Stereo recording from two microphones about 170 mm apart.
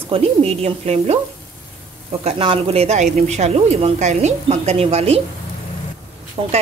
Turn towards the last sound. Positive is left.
turn(degrees=-35)  # may be behind; listen again after turning